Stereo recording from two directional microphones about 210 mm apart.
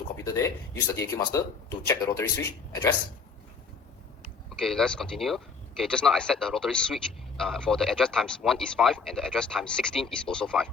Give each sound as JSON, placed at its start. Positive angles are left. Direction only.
{"t": 0.2, "sound": "speech", "side_deg": 15}
{"t": 4.6, "sound": "speech", "side_deg": 0}